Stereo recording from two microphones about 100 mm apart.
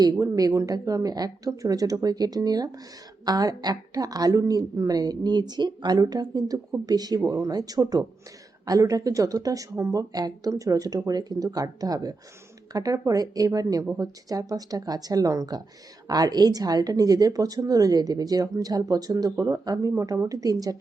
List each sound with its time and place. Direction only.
0.0 s a woman's voice: 40° right (ahead or behind)